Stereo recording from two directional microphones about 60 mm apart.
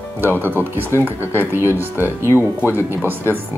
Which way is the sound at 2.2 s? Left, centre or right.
Left.